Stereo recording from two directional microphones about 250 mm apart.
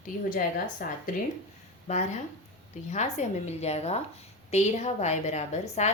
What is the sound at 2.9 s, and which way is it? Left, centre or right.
A woman's voice, left.